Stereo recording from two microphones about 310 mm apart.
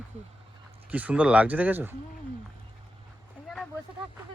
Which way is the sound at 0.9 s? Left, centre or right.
Centre.